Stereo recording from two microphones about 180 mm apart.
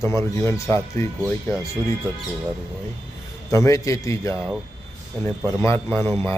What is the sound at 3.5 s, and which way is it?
Speech, 15° left (ahead or behind).